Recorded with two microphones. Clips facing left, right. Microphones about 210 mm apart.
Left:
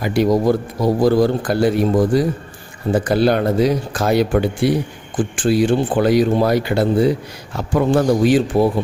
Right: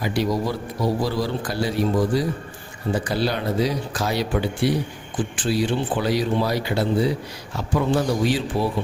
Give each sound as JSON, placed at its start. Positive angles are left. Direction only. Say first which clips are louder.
{"t": 0.0, "sound": "a man's voice", "louder": "left 7 dB", "side_deg": 50}